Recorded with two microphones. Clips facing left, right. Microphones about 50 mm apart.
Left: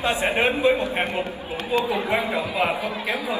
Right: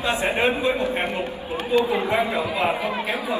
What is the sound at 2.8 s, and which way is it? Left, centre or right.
Speech, right.